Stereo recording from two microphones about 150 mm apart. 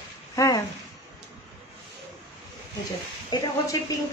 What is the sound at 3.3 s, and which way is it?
Speech, 30° left (ahead or behind).